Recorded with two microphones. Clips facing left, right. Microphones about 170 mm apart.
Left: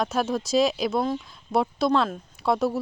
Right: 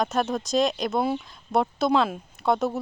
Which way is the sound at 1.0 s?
10° right (ahead or behind).